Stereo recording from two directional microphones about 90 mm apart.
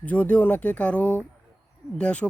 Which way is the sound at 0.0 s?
15° left (ahead or behind).